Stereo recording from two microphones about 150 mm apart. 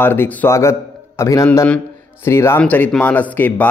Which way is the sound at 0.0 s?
15° left (ahead or behind).